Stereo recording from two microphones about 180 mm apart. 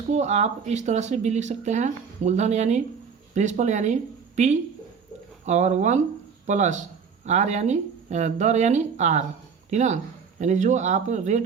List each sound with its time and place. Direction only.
0.1 s speech: 40° right (ahead or behind)